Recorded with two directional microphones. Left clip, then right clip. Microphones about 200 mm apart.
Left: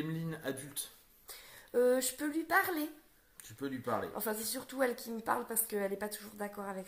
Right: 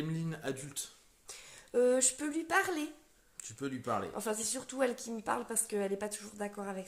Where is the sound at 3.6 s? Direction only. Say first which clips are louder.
Right 1 dB; 50° right (ahead or behind).